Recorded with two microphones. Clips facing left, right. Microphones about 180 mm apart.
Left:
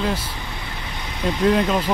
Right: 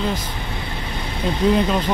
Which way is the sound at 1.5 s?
Centre (ahead or behind).